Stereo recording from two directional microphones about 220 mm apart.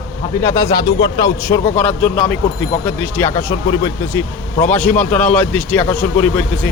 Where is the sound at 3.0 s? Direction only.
10° left (ahead or behind).